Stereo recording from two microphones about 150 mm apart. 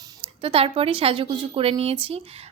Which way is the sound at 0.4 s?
40° right (ahead or behind).